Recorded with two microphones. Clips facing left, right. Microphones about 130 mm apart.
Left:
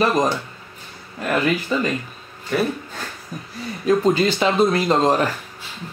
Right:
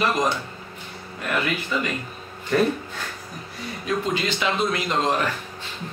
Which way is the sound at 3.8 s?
40° left (ahead or behind).